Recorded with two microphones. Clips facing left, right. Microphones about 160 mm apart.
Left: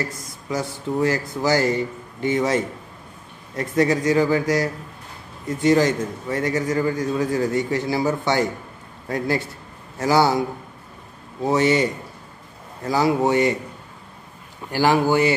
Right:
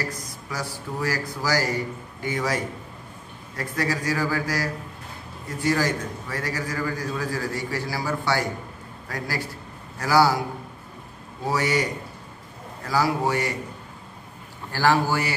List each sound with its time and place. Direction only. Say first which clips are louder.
0.0 s a man's voice: left 2 dB; 25° left (ahead or behind)
11.5 s a man's voice: left 6 dB; 25° left (ahead or behind)
14.7 s a man's voice: left 4 dB; 15° left (ahead or behind)